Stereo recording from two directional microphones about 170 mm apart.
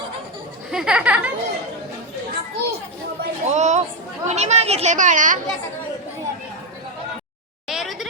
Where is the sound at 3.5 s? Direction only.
40° right (ahead or behind).